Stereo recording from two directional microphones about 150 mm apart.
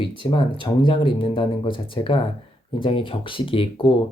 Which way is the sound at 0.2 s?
35° left (ahead or behind).